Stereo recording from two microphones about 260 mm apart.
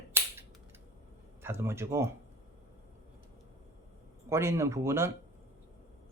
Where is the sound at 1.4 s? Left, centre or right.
Centre.